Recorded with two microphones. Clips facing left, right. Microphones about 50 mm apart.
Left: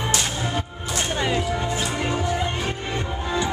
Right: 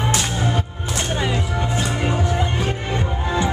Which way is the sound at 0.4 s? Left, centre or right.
Right.